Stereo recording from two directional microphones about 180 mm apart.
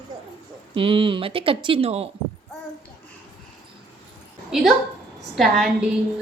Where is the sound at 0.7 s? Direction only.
30° right (ahead or behind).